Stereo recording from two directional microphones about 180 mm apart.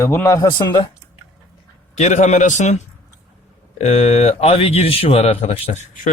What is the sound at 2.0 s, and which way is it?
Speech, 40° left (ahead or behind).